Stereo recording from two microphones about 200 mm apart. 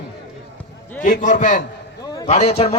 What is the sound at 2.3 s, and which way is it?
Speech, 35° left (ahead or behind).